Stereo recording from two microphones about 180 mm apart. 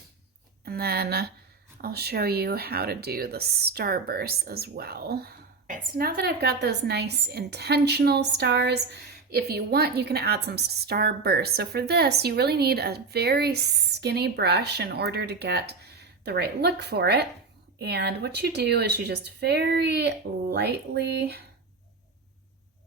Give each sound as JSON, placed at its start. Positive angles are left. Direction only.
{"t": 0.6, "sound": "speech", "side_deg": -60}